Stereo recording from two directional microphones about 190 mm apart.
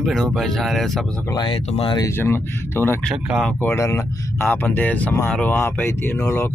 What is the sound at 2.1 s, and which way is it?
Speech, 15° left (ahead or behind).